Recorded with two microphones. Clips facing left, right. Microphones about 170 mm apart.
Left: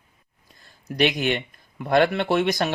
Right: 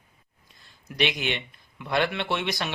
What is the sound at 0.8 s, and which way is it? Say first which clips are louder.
Speech: left 6 dB; 45° left (ahead or behind).